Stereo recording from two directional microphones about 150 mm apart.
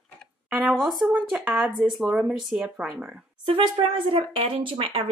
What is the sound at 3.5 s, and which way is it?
Speech, 35° right (ahead or behind).